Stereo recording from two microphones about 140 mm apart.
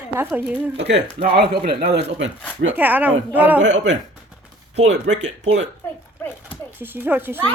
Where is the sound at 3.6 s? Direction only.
60° right (ahead or behind).